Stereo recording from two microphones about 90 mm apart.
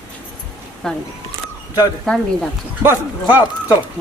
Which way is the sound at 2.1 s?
5° left (ahead or behind).